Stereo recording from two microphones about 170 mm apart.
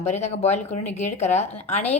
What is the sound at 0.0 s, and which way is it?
A woman's voice, 40° left (ahead or behind).